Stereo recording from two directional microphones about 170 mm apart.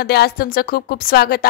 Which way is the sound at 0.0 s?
70° left (ahead or behind).